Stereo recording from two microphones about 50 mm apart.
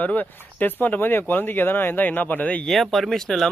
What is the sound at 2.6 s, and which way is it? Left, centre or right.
Speech, centre.